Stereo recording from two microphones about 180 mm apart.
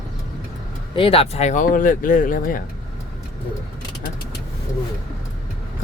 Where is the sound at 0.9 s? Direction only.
30° left (ahead or behind); by 2.5 s 50° left (ahead or behind).